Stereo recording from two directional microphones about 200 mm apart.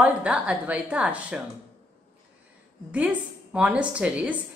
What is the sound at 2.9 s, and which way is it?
A woman's voice, 5° right (ahead or behind).